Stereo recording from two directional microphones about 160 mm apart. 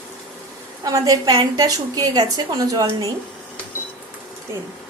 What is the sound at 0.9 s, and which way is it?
A woman's voice, 20° right (ahead or behind).